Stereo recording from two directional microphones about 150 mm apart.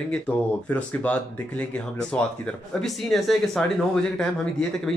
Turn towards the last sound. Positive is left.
turn(degrees=5)  # may be behind; listen again after turning